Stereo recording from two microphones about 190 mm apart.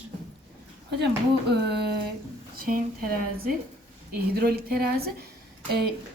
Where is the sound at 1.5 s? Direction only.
60° right (ahead or behind).